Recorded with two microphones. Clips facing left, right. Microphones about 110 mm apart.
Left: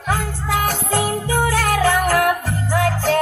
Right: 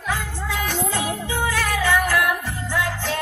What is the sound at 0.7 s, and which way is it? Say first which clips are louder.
Music: left 4 dB; 40° left (ahead or behind).